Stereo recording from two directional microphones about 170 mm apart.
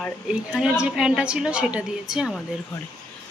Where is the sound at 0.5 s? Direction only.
5° right (ahead or behind).